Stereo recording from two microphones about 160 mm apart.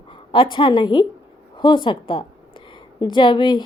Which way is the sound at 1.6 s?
30° left (ahead or behind).